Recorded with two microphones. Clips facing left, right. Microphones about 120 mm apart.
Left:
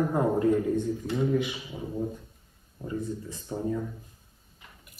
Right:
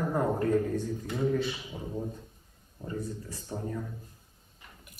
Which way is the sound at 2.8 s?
15° left (ahead or behind).